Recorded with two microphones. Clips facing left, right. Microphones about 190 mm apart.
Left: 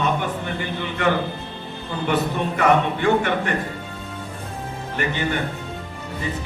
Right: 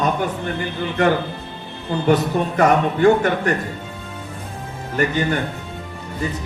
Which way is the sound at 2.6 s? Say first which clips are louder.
Right 4 dB; 40° right (ahead or behind).